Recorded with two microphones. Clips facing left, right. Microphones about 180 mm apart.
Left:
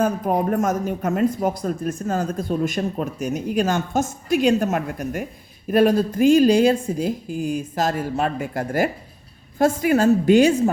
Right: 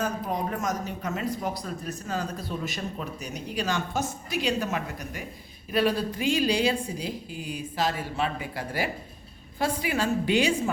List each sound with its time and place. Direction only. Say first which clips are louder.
0.0 s speech: left 9 dB; 55° left (ahead or behind)